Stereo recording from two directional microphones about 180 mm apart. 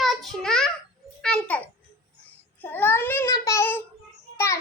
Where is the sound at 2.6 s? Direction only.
10° left (ahead or behind).